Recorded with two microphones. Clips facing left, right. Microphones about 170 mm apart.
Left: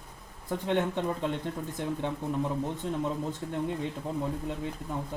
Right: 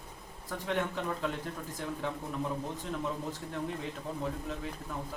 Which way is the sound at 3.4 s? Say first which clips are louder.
Left 5 dB; 25° left (ahead or behind).